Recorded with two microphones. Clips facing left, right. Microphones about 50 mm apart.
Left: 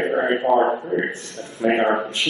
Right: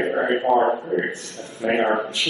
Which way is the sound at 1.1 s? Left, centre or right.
Left.